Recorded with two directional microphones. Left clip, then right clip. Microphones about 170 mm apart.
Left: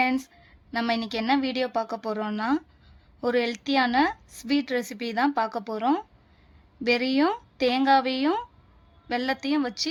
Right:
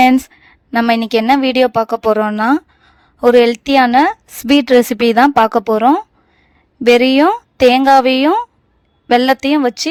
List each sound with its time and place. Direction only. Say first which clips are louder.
0.0 s speech: right 15 dB; 60° right (ahead or behind)